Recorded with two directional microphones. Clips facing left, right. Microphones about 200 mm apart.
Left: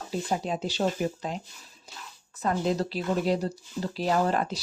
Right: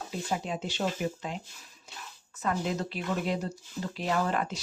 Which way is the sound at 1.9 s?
35° left (ahead or behind).